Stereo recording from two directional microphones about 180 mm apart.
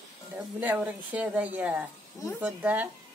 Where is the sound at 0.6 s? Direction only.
10° right (ahead or behind).